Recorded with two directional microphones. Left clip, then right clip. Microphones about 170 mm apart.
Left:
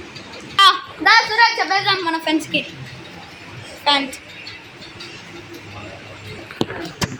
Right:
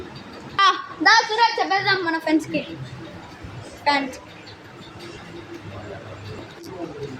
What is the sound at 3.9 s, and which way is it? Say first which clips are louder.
Speech: left 3 dB; centre (ahead or behind).